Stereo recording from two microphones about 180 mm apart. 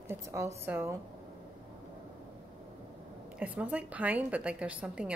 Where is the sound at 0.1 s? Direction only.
15° right (ahead or behind).